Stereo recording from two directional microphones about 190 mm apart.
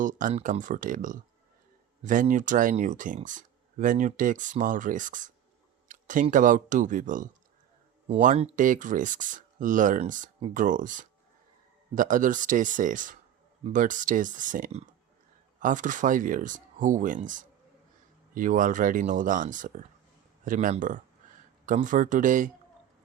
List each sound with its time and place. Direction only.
0.0 s speech: 45° right (ahead or behind)
5.9 s a sound: 45° right (ahead or behind)
6.3 s speech: 45° right (ahead or behind)